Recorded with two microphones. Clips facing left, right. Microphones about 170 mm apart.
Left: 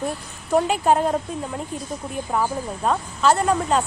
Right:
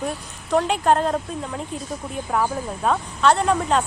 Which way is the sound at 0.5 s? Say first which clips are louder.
Even; 5° left (ahead or behind).